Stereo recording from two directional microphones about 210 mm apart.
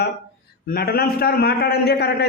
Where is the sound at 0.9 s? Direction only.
45° left (ahead or behind).